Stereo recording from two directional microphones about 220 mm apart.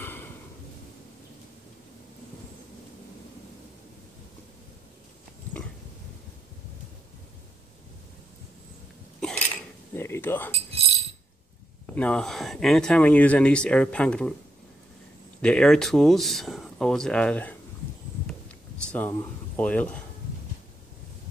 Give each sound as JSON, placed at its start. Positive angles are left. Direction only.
{"t": 0.0, "sound": "a sound", "side_deg": 10}
{"t": 9.2, "sound": "a sound", "side_deg": 5}
{"t": 9.9, "sound": "cutlery", "side_deg": 10}
{"t": 10.5, "sound": "speech", "side_deg": -25}
{"t": 11.8, "sound": "speech", "side_deg": 5}
{"t": 15.4, "sound": "speech", "side_deg": 5}
{"t": 18.8, "sound": "speech", "side_deg": 5}